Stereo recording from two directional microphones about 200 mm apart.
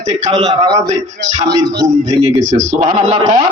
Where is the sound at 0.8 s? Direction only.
35° right (ahead or behind).